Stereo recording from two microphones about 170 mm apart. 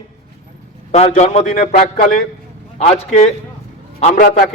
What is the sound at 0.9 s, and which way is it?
A man's voice, 40° left (ahead or behind).